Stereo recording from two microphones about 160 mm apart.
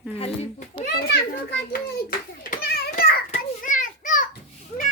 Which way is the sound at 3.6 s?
55° left (ahead or behind).